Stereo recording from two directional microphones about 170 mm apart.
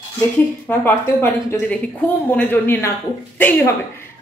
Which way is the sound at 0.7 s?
15° left (ahead or behind).